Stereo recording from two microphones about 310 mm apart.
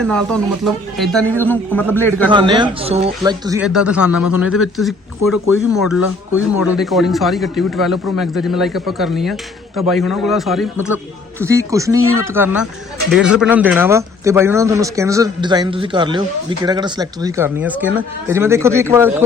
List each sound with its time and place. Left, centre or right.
0.0 s a man's voice: centre
2.3 s a man's voice: centre